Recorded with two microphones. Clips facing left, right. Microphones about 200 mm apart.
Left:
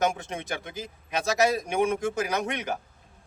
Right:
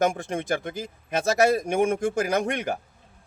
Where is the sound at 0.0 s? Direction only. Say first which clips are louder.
Right 3 dB; 50° right (ahead or behind).